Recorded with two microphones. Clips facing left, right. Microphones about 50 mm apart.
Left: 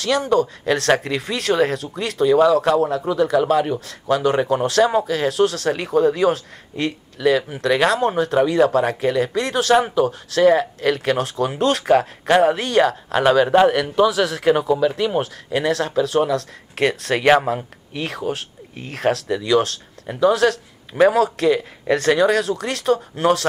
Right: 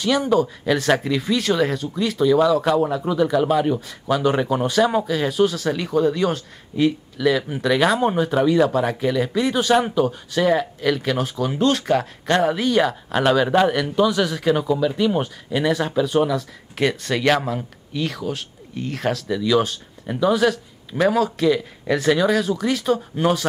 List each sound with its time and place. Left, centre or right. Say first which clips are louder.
0.0 s speech: even; centre
4.4 s speech: left 2 dB; centre
5.7 s speech: left 2 dB; centre
8.0 s speech: left 1 dB; centre
9.8 s speech: left 2 dB; centre
12.6 s speech: left 2 dB; centre
14.4 s speech: left 4 dB; left
14.8 s speech: left 1 dB; centre
15.7 s speech: left 1 dB; centre
17.1 s speech: left 6 dB; left
19.4 s speech: left 1 dB; centre